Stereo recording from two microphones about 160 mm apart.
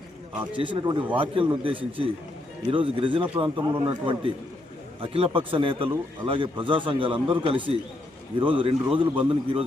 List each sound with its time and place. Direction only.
0.5 s a man's voice: 30° right (ahead or behind)